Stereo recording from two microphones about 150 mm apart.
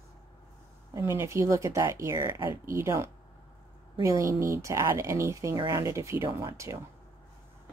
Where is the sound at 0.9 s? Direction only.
20° right (ahead or behind).